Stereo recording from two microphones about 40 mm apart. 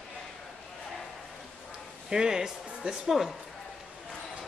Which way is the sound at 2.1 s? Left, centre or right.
Centre.